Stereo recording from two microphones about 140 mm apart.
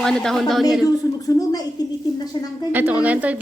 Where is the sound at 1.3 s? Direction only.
25° left (ahead or behind).